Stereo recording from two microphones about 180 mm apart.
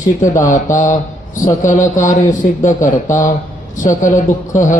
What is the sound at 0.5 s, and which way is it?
Mantra, 45° left (ahead or behind).